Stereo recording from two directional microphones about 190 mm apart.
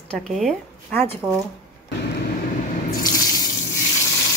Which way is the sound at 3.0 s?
20° left (ahead or behind).